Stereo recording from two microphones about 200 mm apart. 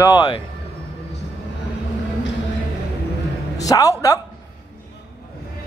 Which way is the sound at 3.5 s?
15° left (ahead or behind).